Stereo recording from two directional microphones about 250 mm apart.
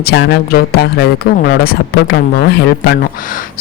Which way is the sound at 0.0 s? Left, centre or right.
Left.